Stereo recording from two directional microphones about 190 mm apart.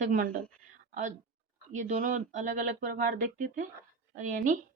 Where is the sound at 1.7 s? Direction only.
40° right (ahead or behind).